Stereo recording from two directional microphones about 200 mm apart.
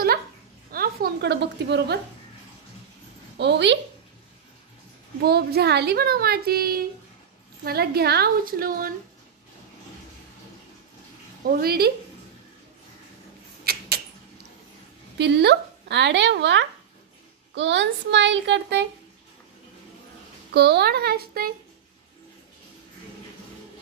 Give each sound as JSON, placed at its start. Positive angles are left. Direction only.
{"t": 0.7, "sound": "a woman's voice", "side_deg": -50}
{"t": 3.3, "sound": "a child's voice", "side_deg": -60}
{"t": 5.2, "sound": "a woman's voice", "side_deg": -50}
{"t": 11.4, "sound": "a woman's voice", "side_deg": -50}
{"t": 13.7, "sound": "a sound", "side_deg": -50}
{"t": 15.1, "sound": "a child's voice", "side_deg": -55}
{"t": 20.5, "sound": "a woman's voice", "side_deg": -55}